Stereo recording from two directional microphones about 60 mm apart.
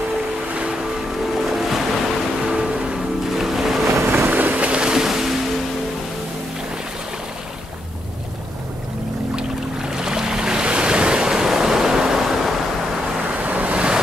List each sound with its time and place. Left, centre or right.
1.7 s ocean: centre
2.4 s vehicle: centre
3.3 s boat: centre
4.3 s boat: right; by 5.3 s centre
9.9 s waves: centre
13.3 s waves: right